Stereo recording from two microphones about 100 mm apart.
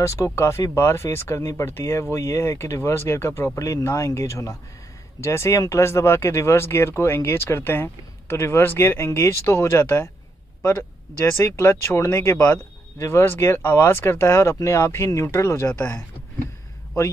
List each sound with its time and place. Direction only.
0.0 s speech: 30° left (ahead or behind)